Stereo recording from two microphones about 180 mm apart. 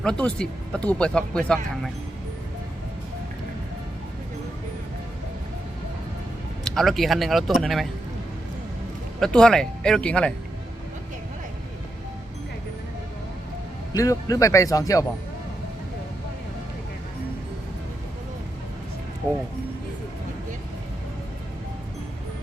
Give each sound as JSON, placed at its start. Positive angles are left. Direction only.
{"t": 0.0, "sound": "speech", "side_deg": 5}
{"t": 6.7, "sound": "speech", "side_deg": 0}
{"t": 9.2, "sound": "speech", "side_deg": 5}
{"t": 13.9, "sound": "speech", "side_deg": 20}